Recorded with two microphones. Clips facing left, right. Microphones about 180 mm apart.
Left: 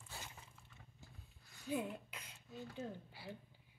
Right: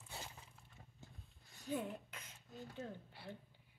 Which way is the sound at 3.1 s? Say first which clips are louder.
Left 1 dB; centre (ahead or behind).